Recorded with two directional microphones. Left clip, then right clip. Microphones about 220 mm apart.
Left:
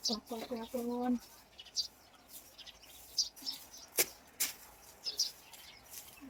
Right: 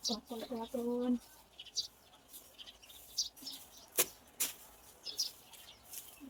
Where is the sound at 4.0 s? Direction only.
15° right (ahead or behind).